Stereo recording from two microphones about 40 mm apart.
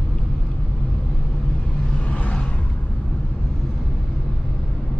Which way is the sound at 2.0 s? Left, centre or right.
Left.